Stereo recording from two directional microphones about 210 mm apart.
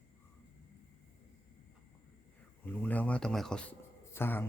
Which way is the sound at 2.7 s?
5° left (ahead or behind).